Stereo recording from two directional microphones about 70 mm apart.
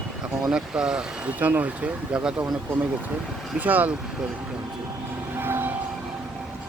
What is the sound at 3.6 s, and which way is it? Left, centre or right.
Speech, right.